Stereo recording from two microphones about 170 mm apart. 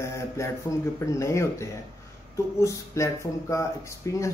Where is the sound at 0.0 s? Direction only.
15° left (ahead or behind).